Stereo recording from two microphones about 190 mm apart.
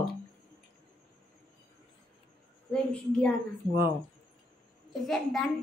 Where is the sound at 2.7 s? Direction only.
5° left (ahead or behind).